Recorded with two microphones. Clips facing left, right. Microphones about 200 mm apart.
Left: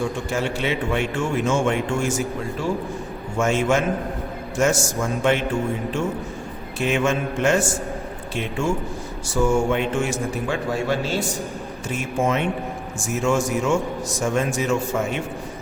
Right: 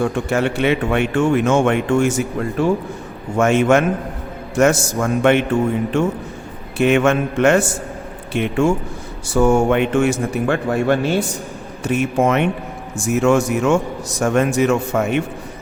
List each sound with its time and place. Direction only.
0.0 s a man's voice: 60° right (ahead or behind)